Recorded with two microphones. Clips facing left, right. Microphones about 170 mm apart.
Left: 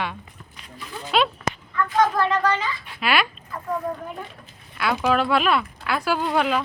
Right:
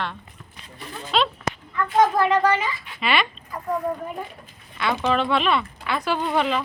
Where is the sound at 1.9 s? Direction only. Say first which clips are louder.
Right 2 dB; 25° right (ahead or behind).